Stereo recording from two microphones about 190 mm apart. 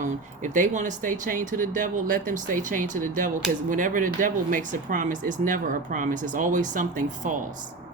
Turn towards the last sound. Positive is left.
turn(degrees=-40)  # may be behind; listen again after turning